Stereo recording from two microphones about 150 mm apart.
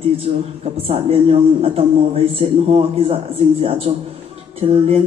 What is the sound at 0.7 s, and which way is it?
Speech, 40° right (ahead or behind).